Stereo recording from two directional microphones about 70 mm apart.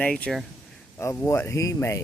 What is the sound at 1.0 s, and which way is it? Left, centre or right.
Speech, left.